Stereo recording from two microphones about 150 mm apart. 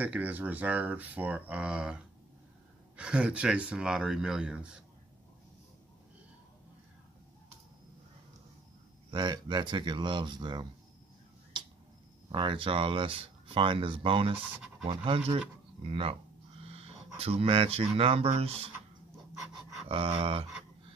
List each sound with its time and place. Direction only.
0.0 s speech: 10° right (ahead or behind)
9.1 s speech: 30° right (ahead or behind)
12.3 s speech: 30° right (ahead or behind)
19.5 s a sound: 35° right (ahead or behind)